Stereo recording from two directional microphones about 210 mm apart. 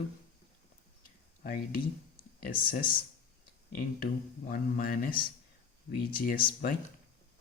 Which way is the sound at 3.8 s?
45° left (ahead or behind).